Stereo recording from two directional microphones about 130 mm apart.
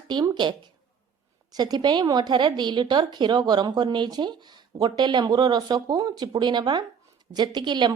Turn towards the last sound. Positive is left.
turn(degrees=-35)  # may be behind; listen again after turning